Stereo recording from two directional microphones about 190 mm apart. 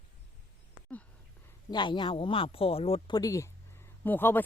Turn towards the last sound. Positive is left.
turn(degrees=10)  # may be behind; listen again after turning